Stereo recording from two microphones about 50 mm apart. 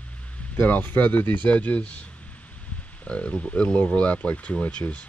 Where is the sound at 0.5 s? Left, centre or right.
Left.